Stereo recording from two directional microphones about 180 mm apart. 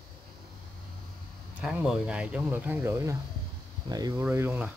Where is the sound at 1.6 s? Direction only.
5° right (ahead or behind); by 4.2 s 20° right (ahead or behind).